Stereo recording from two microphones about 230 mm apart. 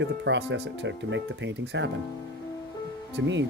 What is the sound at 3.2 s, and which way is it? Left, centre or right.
Speech, right.